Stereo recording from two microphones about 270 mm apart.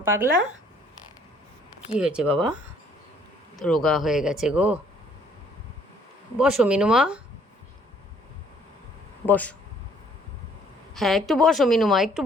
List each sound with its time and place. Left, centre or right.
0.0 s speech: centre
2.0 s a woman's voice: centre
2.3 s speech: centre
3.6 s a woman's voice: centre
6.3 s a woman's voice: centre
9.2 s a woman's voice: centre
10.9 s a woman's voice: centre